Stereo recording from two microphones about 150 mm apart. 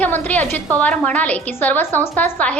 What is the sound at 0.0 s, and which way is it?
A woman's voice, 10° left (ahead or behind).